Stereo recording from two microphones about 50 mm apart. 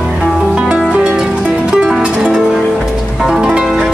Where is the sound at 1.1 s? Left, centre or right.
Centre.